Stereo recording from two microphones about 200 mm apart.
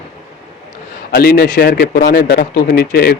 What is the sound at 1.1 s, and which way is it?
Speech, 50° left (ahead or behind).